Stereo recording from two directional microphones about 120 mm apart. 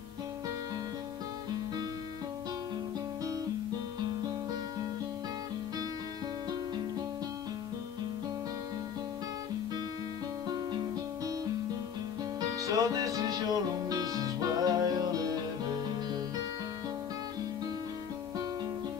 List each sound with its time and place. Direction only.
10.5 s music: 35° right (ahead or behind)
12.4 s music: 30° right (ahead or behind)